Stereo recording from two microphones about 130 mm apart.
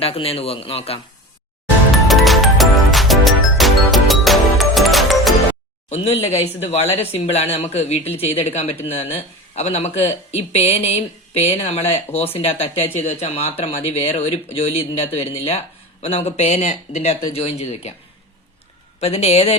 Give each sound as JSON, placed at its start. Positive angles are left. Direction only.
{"t": 0.0, "sound": "speech", "side_deg": 50}
{"t": 2.0, "sound": "music", "side_deg": 0}
{"t": 5.9, "sound": "speech", "side_deg": 55}
{"t": 18.9, "sound": "speech", "side_deg": 55}